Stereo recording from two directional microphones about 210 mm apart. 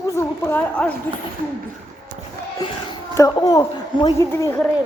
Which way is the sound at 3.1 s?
15° left (ahead or behind).